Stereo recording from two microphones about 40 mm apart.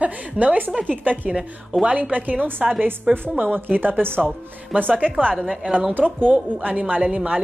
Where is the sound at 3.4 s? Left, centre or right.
Right.